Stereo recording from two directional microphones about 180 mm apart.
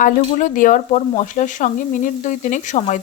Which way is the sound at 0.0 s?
45° left (ahead or behind).